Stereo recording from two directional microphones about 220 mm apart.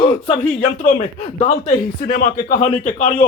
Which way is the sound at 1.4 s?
30° left (ahead or behind).